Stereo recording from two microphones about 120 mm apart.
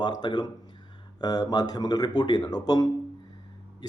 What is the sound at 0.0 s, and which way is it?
A man's voice, 35° left (ahead or behind).